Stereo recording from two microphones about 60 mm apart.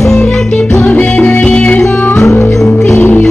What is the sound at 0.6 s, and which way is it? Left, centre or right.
Music, left.